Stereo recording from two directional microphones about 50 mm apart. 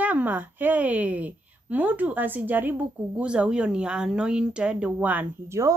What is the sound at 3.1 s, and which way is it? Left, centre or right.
Speech, right.